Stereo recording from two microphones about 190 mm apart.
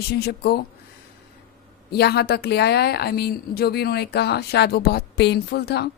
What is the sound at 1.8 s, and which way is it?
A woman's voice, 60° left (ahead or behind).